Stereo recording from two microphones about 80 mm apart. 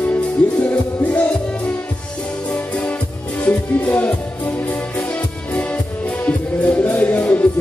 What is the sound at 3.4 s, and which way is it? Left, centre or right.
Music, centre.